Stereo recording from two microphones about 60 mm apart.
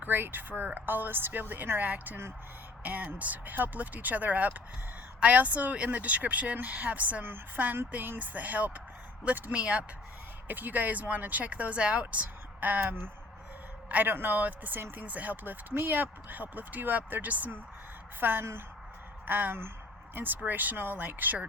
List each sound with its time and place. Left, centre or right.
0.0 s speech: right
15.0 s speech: right